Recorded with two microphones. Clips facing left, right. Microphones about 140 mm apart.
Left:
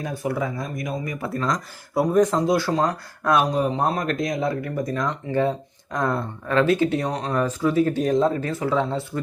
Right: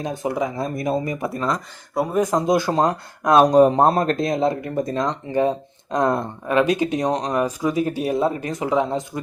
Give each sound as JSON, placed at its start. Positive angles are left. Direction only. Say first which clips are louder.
{"t": 0.0, "sound": "speech", "louder": "right 2 dB", "side_deg": -20}
{"t": 0.6, "sound": "speech", "louder": "right 6 dB", "side_deg": -30}
{"t": 3.4, "sound": "speech", "louder": "right 9 dB", "side_deg": -45}
{"t": 3.8, "sound": "speech", "louder": "right 5 dB", "side_deg": -35}